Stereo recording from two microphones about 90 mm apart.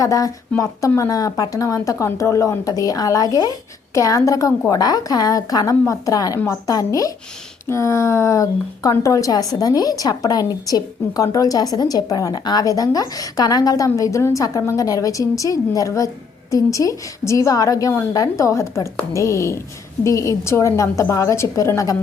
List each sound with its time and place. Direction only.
0.0 s a woman's voice: 40° left (ahead or behind)